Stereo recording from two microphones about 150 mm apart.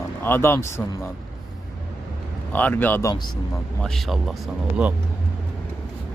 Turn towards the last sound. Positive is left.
turn(degrees=-5)  # may be behind; listen again after turning